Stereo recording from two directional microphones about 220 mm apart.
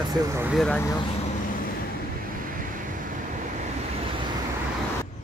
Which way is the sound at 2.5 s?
40° right (ahead or behind).